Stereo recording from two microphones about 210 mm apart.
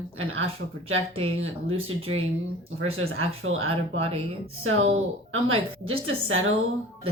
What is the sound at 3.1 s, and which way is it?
Speech, 75° right (ahead or behind).